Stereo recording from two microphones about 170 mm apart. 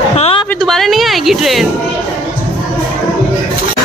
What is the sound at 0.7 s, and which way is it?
Speech, centre (ahead or behind).